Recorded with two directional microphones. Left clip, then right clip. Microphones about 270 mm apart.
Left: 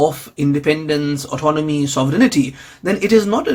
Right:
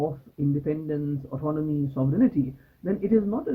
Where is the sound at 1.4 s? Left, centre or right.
Left.